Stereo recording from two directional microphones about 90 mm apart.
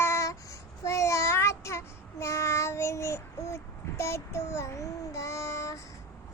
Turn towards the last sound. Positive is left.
turn(degrees=35)  # may be behind; listen again after turning